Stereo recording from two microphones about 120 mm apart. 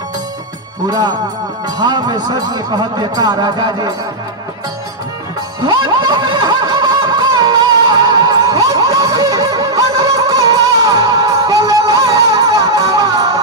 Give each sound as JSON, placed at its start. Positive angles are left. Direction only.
{"t": 0.8, "sound": "speech", "side_deg": -35}
{"t": 5.6, "sound": "snicker", "side_deg": -35}